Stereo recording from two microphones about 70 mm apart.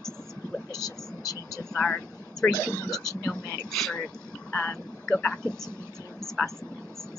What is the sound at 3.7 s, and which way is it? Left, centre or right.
Speech, centre.